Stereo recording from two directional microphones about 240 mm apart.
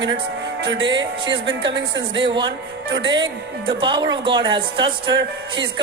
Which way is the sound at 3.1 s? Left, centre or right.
Centre.